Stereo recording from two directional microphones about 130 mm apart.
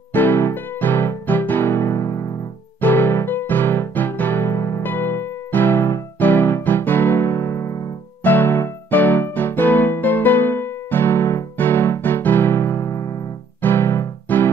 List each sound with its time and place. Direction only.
0.1 s music: 15° left (ahead or behind)
8.2 s electric piano: 15° left (ahead or behind)
13.6 s music: 20° left (ahead or behind)